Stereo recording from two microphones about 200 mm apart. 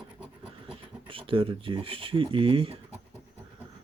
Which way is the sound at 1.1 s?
25° right (ahead or behind).